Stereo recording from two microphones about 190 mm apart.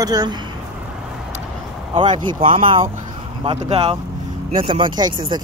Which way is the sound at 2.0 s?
25° right (ahead or behind).